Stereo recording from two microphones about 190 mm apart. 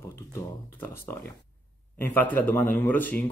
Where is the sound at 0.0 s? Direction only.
15° left (ahead or behind).